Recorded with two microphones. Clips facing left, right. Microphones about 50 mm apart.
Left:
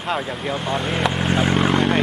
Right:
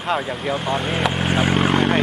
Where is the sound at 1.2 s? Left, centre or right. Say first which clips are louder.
Even; centre.